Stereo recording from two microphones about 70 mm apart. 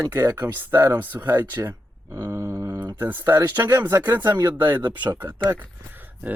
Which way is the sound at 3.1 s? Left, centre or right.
Right.